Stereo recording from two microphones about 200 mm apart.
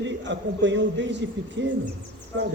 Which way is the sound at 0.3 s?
65° right (ahead or behind).